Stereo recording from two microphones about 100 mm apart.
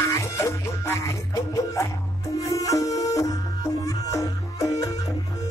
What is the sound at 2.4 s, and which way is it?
Music, 35° left (ahead or behind).